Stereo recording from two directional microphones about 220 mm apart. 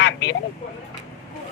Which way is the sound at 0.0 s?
55° left (ahead or behind).